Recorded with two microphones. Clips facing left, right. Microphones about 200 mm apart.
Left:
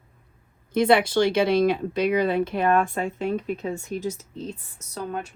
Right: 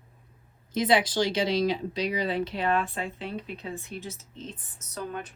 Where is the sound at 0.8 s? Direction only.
55° left (ahead or behind).